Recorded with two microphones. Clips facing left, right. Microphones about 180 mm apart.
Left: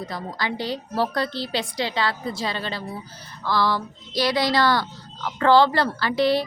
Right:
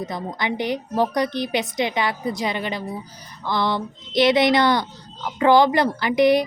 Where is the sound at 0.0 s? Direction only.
20° right (ahead or behind).